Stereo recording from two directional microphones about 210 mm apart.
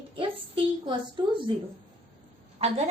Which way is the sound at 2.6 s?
30° right (ahead or behind).